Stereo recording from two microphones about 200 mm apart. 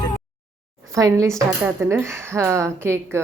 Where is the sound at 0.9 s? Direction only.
15° right (ahead or behind).